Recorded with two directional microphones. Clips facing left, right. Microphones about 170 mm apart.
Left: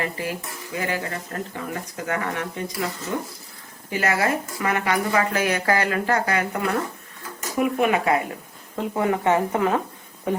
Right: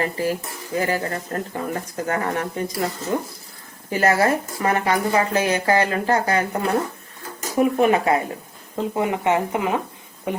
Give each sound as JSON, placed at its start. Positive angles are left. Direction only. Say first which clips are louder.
{"t": 0.0, "sound": "speech", "louder": "right 5 dB", "side_deg": -35}
{"t": 8.7, "sound": "speech", "louder": "even", "side_deg": -20}